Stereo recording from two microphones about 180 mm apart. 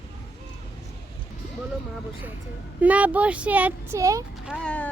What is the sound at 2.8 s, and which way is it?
Speech, 10° right (ahead or behind).